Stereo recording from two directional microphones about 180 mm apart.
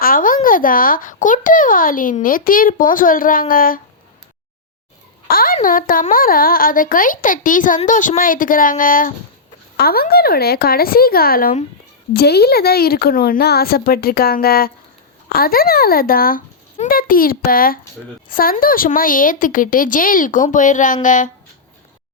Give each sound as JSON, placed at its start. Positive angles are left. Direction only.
{"t": 0.0, "sound": "a child's voice", "side_deg": 50}
{"t": 5.3, "sound": "a sound", "side_deg": 55}
{"t": 5.5, "sound": "a child's voice", "side_deg": 50}